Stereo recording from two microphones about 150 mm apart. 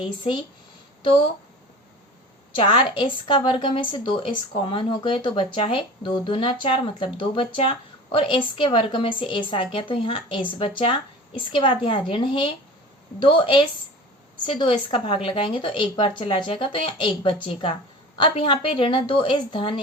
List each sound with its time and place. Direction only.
0.0 s a woman's voice: 30° left (ahead or behind)
2.6 s a woman's voice: 35° left (ahead or behind)
14.6 s a woman's voice: 35° left (ahead or behind)